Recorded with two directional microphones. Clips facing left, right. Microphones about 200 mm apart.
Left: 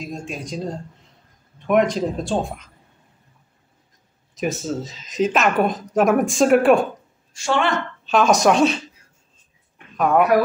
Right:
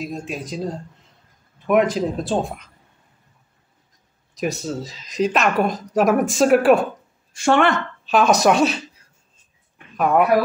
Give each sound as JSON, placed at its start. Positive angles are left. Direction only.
{"t": 0.0, "sound": "speech", "side_deg": -5}
{"t": 4.4, "sound": "speech", "side_deg": 0}
{"t": 7.3, "sound": "a woman's voice", "side_deg": -55}
{"t": 8.0, "sound": "speech", "side_deg": 0}
{"t": 9.9, "sound": "speech", "side_deg": -5}